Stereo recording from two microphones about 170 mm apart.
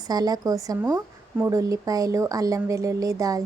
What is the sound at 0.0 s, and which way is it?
Speech, 25° right (ahead or behind).